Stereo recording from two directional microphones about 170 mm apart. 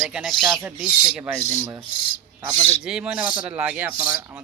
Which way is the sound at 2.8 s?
5° right (ahead or behind).